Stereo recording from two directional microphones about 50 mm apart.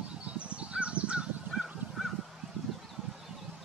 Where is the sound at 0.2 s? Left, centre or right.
Right.